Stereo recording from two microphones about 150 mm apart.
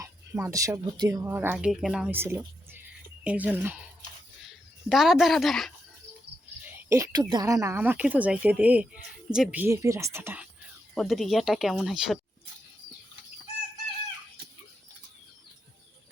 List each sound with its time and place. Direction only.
0.0 s speech: 20° right (ahead or behind)
1.2 s speech: 15° right (ahead or behind)
1.5 s speech: 5° right (ahead or behind)
2.1 s speech: 15° right (ahead or behind)
4.9 s speech: centre (ahead or behind)
6.6 s speech: 15° right (ahead or behind)
10.9 s speech: centre (ahead or behind)